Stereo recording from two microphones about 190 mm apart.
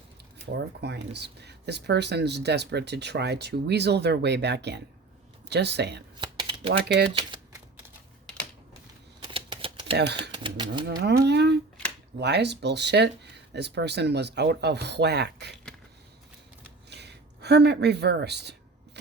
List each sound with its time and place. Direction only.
0.5 s speech: 65° right (ahead or behind)
6.1 s a sound: 25° right (ahead or behind)
6.7 s speech: 60° right (ahead or behind)
7.1 s speech: 25° right (ahead or behind)
9.2 s typewriter: 25° right (ahead or behind)
10.2 s speech: 25° right (ahead or behind)
11.2 s speech: 60° right (ahead or behind)
16.9 s speech: 60° right (ahead or behind)